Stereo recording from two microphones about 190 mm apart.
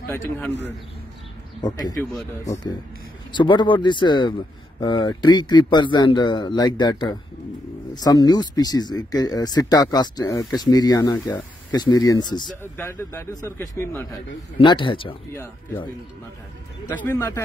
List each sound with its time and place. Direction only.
1.6 s speech: 20° left (ahead or behind)
3.3 s a man's voice: 25° left (ahead or behind)
14.6 s speech: 25° left (ahead or behind)
15.3 s a man's voice: 10° left (ahead or behind)
16.9 s a man's voice: 10° left (ahead or behind)